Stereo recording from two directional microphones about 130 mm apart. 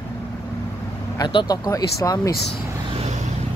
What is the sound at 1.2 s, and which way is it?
Speech, 35° left (ahead or behind).